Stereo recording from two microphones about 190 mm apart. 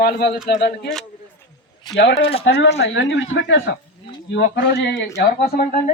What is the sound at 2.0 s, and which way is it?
Speech, 65° left (ahead or behind).